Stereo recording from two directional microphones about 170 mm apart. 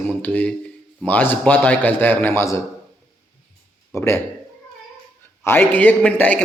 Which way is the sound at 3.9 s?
15° left (ahead or behind).